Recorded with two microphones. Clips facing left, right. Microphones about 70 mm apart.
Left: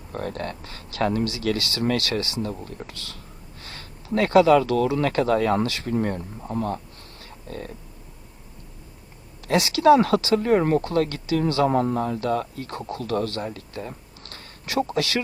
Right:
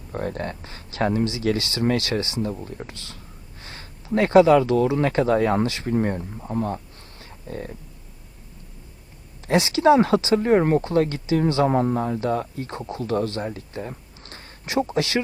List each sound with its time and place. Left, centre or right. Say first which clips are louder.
0.1 s speech: right 2 dB; right
7.2 s a sound: right 2 dB; right
9.5 s speech: even; right